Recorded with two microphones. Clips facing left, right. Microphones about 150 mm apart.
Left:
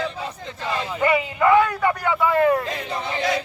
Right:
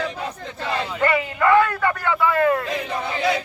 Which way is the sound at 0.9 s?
15° left (ahead or behind).